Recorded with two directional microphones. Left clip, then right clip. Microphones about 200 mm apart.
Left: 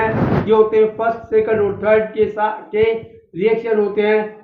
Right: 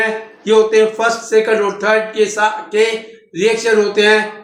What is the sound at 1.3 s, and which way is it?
A man's voice, 10° left (ahead or behind).